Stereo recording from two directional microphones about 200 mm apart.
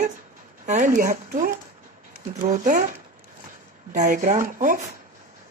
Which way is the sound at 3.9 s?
40° right (ahead or behind).